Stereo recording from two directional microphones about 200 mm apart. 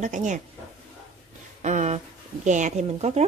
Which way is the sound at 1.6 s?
35° right (ahead or behind).